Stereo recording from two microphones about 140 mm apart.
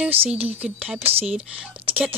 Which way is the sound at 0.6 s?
10° right (ahead or behind).